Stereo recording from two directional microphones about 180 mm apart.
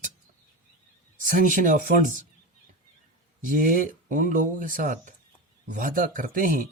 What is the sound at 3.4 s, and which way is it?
Speech, 50° right (ahead or behind).